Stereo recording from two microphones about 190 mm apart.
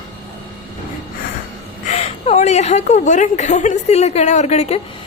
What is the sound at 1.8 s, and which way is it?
A woman's voice, 35° left (ahead or behind).